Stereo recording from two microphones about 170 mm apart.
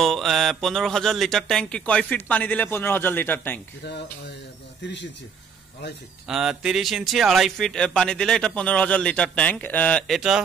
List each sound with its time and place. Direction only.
0.0 s speech: centre (ahead or behind)
4.8 s speech: 90° left
6.2 s speech: 5° right (ahead or behind)